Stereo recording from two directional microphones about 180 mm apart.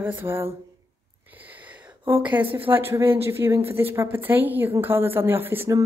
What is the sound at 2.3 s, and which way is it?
Speech, 10° right (ahead or behind).